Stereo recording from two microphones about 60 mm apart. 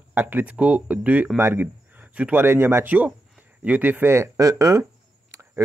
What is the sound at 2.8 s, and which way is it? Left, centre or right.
Speech, right.